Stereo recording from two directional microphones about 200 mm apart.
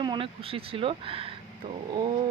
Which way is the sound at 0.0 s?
25° right (ahead or behind).